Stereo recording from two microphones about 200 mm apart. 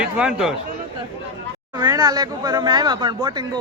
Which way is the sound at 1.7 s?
20° right (ahead or behind).